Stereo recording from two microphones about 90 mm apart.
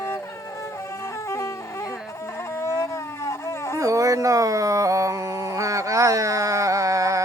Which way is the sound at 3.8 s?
35° right (ahead or behind).